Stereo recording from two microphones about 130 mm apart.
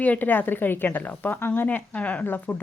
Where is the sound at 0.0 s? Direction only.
15° left (ahead or behind).